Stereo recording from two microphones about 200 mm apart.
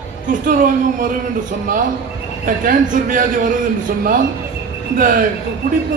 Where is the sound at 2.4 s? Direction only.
45° right (ahead or behind).